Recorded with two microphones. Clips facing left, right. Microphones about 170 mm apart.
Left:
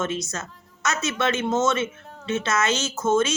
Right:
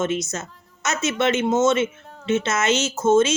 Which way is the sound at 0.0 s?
20° right (ahead or behind).